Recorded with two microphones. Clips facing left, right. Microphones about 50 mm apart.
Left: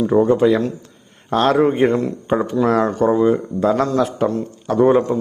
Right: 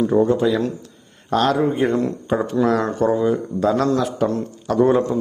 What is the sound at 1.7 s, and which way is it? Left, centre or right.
Speech, left.